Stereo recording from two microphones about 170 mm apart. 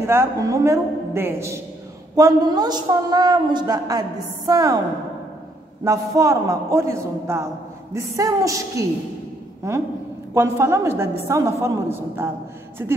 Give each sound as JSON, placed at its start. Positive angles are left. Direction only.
{"t": 0.0, "sound": "a woman's voice", "side_deg": -15}
{"t": 5.9, "sound": "a woman's voice", "side_deg": -20}